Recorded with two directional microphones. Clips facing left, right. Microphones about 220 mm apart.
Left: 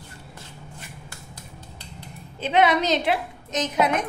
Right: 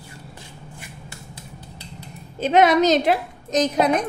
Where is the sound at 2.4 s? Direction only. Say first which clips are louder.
Right 4 dB; 45° right (ahead or behind).